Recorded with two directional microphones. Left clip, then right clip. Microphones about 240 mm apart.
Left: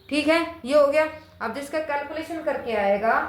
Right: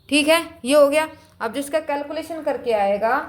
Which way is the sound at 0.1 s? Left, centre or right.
Right.